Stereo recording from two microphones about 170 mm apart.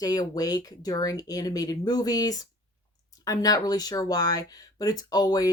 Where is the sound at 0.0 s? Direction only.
20° left (ahead or behind).